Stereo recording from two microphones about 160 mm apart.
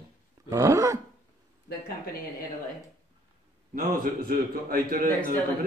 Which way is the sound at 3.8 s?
70° right (ahead or behind).